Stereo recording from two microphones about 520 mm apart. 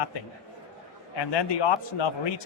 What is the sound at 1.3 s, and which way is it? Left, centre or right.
A man's voice, left.